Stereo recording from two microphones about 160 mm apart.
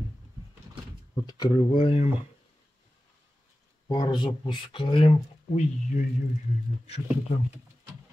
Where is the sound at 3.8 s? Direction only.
25° left (ahead or behind).